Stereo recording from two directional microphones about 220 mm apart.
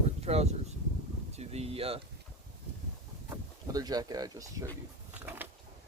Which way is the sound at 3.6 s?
15° right (ahead or behind).